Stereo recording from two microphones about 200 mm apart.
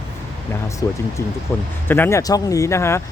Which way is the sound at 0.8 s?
15° left (ahead or behind).